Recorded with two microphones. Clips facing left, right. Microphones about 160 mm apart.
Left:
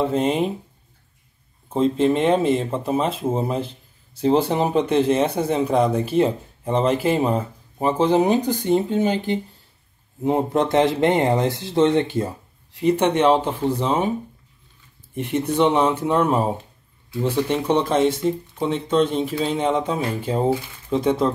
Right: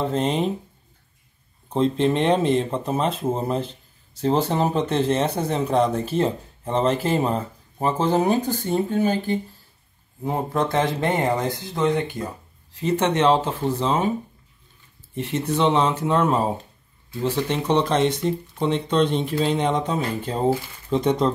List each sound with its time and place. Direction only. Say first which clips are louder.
0.0 s speech: left 3 dB; 10° left (ahead or behind)
1.7 s speech: left 2 dB; 5° left (ahead or behind); by 12.3 s 25° left (ahead or behind)
12.8 s speech: left 2 dB; 10° left (ahead or behind)
15.1 s speech: left 3 dB; 10° left (ahead or behind)
17.5 s speech: right 1 dB; 10° left (ahead or behind)